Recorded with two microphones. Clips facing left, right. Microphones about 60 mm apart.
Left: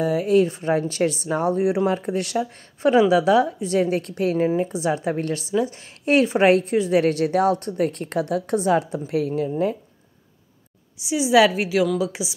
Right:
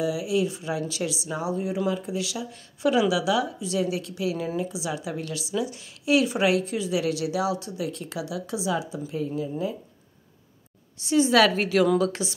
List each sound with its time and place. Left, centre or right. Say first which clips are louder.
0.0 s a woman's voice: left 7 dB; left
11.0 s a woman's voice: left 3 dB; centre